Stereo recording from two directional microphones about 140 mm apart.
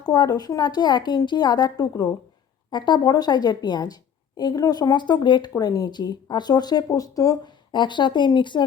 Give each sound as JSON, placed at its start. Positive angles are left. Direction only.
{"t": 0.1, "sound": "a woman's voice", "side_deg": 30}